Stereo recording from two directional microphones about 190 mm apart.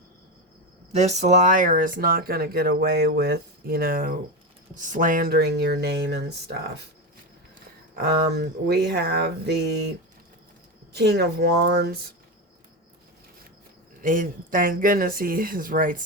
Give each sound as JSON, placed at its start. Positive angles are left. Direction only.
{"t": 0.9, "sound": "speech", "side_deg": -35}
{"t": 7.9, "sound": "speech", "side_deg": -60}
{"t": 10.9, "sound": "speech", "side_deg": -60}
{"t": 14.0, "sound": "speech", "side_deg": -45}